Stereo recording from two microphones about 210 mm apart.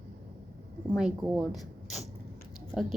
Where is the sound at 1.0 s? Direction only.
5° right (ahead or behind).